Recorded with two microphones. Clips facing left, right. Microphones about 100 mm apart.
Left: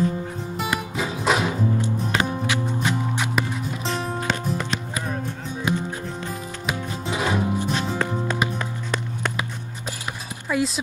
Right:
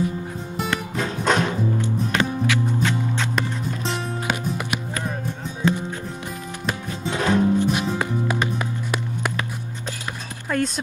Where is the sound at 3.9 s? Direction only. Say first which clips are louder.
Left 2 dB; 10° right (ahead or behind).